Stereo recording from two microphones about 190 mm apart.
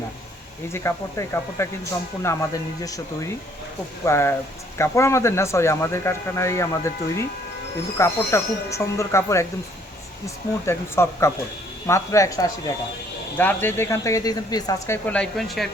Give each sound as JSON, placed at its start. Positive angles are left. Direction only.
{"t": 0.7, "sound": "speech", "side_deg": 15}